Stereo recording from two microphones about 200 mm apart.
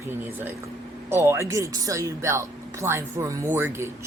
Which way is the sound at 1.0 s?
10° right (ahead or behind).